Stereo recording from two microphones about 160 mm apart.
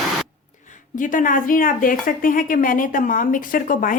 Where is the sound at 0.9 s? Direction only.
55° left (ahead or behind).